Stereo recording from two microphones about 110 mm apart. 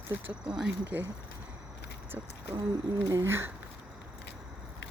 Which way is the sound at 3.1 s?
20° right (ahead or behind).